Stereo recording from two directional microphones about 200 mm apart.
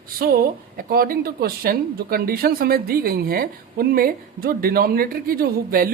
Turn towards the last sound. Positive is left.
turn(degrees=-45)  # may be behind; listen again after turning